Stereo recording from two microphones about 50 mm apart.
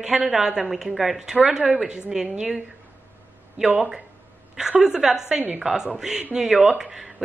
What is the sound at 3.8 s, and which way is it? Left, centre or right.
A woman's voice, centre.